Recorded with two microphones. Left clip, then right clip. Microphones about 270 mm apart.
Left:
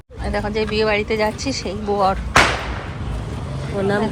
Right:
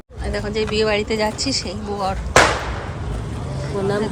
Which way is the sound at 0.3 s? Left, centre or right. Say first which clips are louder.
Left 1 dB; centre.